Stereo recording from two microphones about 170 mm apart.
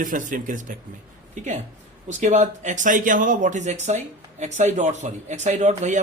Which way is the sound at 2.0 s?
45° right (ahead or behind).